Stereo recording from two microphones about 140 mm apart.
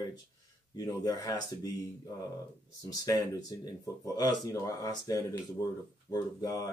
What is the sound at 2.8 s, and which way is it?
Speech, 25° left (ahead or behind).